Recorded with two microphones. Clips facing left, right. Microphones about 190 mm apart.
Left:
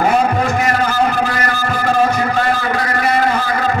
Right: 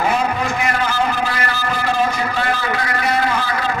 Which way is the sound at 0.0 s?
45° left (ahead or behind).